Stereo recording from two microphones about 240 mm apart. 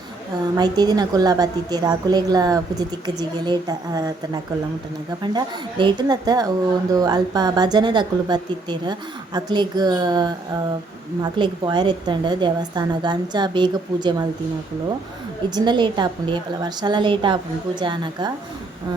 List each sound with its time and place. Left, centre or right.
0.5 s a woman's voice: centre
5.2 s a woman's voice: centre
15.4 s a woman's voice: centre